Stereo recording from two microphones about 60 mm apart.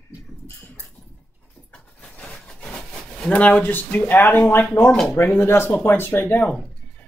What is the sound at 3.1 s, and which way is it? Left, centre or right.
Speech, left.